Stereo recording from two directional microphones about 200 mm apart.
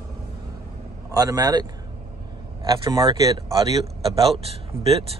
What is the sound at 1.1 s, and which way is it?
A man's voice, 20° right (ahead or behind).